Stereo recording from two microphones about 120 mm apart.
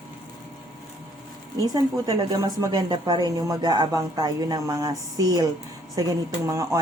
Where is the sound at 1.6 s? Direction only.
30° right (ahead or behind).